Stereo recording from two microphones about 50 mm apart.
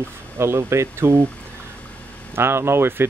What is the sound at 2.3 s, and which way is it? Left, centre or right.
Speech, right.